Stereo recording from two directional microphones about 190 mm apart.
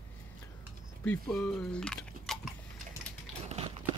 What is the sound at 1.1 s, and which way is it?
Speech, 5° left (ahead or behind).